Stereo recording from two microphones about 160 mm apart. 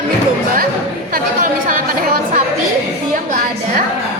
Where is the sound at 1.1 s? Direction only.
60° right (ahead or behind).